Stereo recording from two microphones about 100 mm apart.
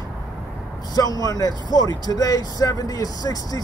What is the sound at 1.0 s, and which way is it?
Speech, 40° left (ahead or behind).